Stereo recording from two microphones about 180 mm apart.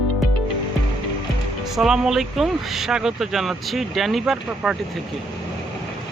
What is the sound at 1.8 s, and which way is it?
Speech, centre (ahead or behind).